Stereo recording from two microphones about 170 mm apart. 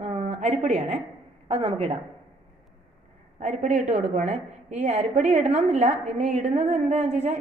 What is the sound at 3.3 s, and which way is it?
A woman's voice, 45° right (ahead or behind).